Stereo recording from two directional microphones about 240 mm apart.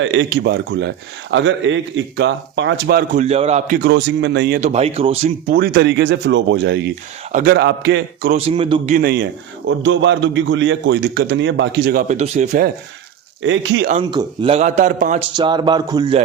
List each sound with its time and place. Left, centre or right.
0.0 s a man's voice: right
3.8 s a man's voice: right
8.3 s a man's voice: right
9.0 s a man's voice: right
13.4 s a man's voice: right
14.0 s a man's voice: centre
15.4 s a man's voice: centre